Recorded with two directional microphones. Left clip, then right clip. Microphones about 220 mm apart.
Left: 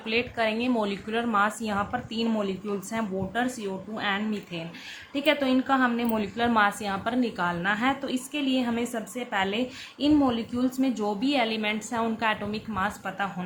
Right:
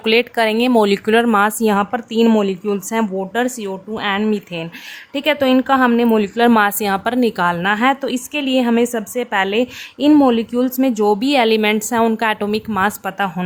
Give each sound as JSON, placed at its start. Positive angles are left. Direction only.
{"t": 0.0, "sound": "a woman's voice", "side_deg": -50}